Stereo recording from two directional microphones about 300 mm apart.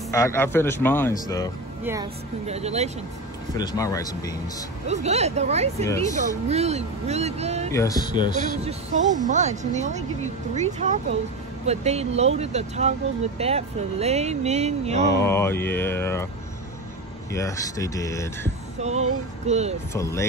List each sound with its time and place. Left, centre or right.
0.1 s speech: centre
2.4 s speech: right
3.5 s speech: centre
4.8 s speech: right
7.7 s speech: centre
9.3 s speech: right
15.1 s speech: centre
17.3 s speech: centre
18.8 s speech: right
19.9 s speech: centre